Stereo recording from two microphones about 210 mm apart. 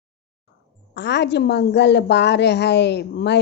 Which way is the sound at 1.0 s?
55° left (ahead or behind).